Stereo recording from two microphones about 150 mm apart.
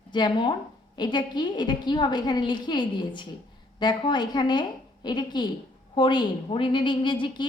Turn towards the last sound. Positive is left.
turn(degrees=30)  # may be behind; listen again after turning